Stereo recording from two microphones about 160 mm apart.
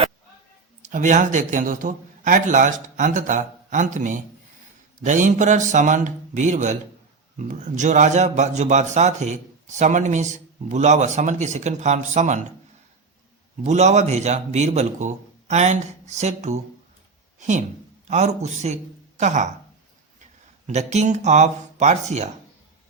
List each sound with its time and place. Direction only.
0.8 s a man's voice: 50° right (ahead or behind)
13.7 s a man's voice: 45° right (ahead or behind)
20.7 s a man's voice: 45° right (ahead or behind)